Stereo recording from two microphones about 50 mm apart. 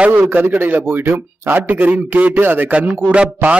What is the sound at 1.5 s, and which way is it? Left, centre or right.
A man's voice, right.